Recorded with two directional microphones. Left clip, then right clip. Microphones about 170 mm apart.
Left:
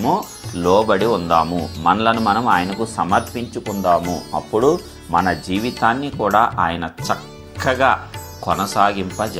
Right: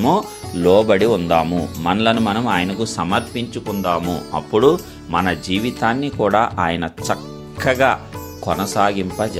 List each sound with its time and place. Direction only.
0.0 s speech: 50° right (ahead or behind)